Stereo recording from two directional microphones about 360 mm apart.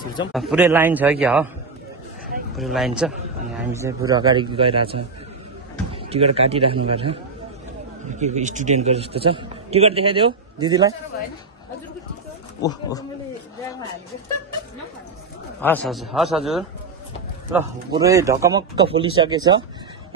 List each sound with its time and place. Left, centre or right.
0.3 s a man's voice: centre
2.5 s a man's voice: centre
6.0 s a man's voice: centre
8.2 s a man's voice: centre
15.6 s a man's voice: centre